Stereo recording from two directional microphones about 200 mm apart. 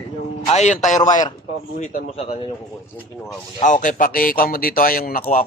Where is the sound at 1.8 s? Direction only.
35° left (ahead or behind).